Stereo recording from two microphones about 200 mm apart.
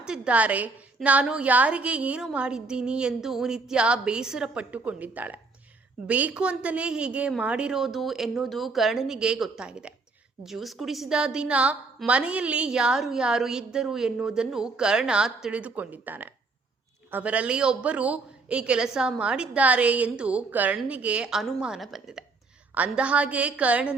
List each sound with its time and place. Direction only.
0.0 s a woman's voice: 5° right (ahead or behind)